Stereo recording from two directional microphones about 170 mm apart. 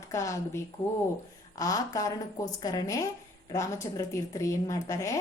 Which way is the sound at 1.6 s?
20° left (ahead or behind).